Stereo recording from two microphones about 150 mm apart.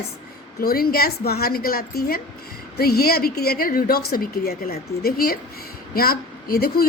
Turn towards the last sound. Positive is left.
turn(degrees=85)